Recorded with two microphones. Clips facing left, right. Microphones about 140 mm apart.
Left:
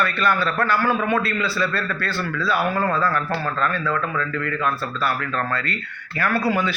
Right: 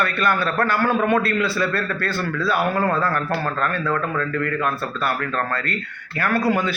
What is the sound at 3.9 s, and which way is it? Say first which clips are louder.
Speech: right 1 dB; 50° right (ahead or behind).